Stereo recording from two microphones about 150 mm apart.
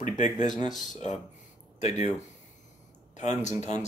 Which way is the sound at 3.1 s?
50° left (ahead or behind).